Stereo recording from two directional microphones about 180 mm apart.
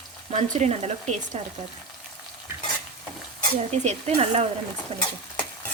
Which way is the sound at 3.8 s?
35° right (ahead or behind).